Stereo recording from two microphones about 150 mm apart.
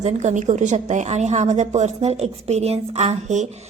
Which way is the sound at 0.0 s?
50° right (ahead or behind).